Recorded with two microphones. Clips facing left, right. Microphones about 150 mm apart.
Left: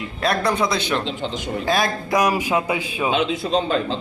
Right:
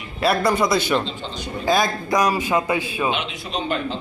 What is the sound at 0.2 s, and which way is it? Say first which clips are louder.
A man's voice: right 2 dB; 5° right (ahead or behind).